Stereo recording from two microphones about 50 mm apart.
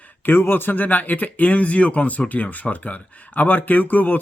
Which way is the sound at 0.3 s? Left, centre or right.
Left.